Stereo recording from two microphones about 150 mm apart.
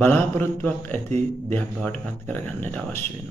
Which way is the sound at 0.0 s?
15° left (ahead or behind).